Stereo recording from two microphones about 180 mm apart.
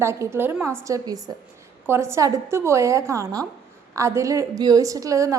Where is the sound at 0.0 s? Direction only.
15° right (ahead or behind).